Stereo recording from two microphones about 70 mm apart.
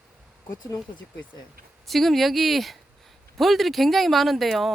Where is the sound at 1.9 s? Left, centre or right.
Centre.